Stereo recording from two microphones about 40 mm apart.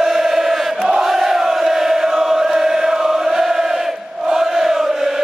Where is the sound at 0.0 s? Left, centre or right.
Centre.